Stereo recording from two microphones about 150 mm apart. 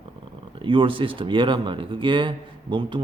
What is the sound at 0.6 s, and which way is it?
Speech, 35° right (ahead or behind).